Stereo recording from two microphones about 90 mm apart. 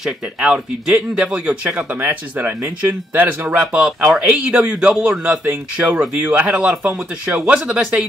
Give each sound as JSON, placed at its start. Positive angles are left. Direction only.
{"t": 0.0, "sound": "a man's voice", "side_deg": -10}
{"t": 1.8, "sound": "speech", "side_deg": -20}
{"t": 3.6, "sound": "a man's voice", "side_deg": -10}